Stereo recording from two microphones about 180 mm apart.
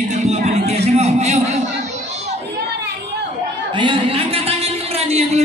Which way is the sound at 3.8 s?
30° right (ahead or behind).